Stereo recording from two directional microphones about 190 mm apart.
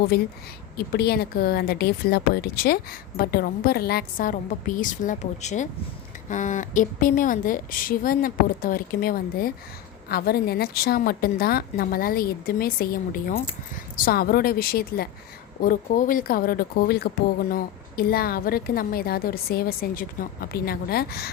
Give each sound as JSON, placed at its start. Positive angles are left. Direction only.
{"t": 0.1, "sound": "a woman's voice", "side_deg": 55}